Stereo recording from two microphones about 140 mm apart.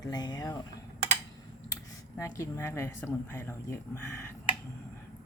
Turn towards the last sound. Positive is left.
turn(degrees=15)  # may be behind; listen again after turning